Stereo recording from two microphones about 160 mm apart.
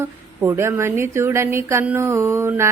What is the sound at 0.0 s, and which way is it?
Speech, 15° right (ahead or behind).